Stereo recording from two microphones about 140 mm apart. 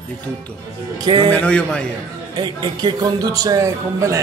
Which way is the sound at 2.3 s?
30° right (ahead or behind).